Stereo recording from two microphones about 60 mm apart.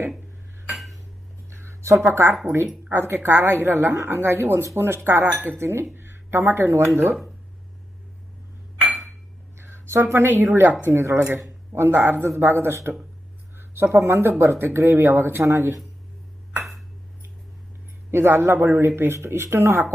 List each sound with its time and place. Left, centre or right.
1.5 s a sound: right
2.0 s speech: right
5.5 s speech: right
9.6 s a sound: right
10.5 s speech: right
13.9 s speech: right
18.1 s speech: right